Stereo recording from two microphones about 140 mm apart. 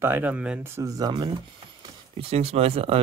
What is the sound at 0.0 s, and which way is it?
Speech, 15° right (ahead or behind).